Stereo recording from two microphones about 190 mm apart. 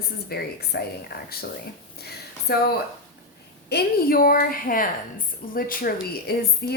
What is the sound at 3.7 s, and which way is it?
A woman's voice, 50° left (ahead or behind).